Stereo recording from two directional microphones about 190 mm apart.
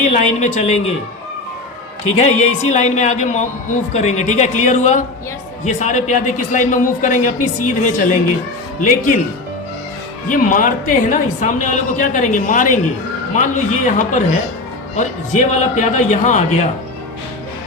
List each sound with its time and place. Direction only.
0.1 s a man's voice: 35° left (ahead or behind)
2.0 s a man's voice: 35° left (ahead or behind)
10.2 s a woman's voice: 45° left (ahead or behind)